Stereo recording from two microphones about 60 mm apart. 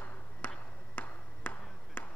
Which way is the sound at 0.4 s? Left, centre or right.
Left.